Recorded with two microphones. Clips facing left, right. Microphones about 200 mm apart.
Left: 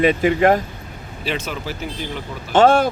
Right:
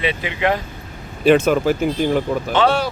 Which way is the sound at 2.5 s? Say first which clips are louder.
Left 6 dB; 50° left (ahead or behind).